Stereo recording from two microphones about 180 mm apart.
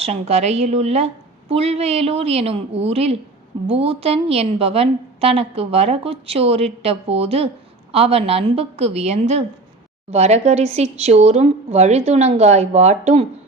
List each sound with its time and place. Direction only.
0.0 s a woman's voice: 35° right (ahead or behind)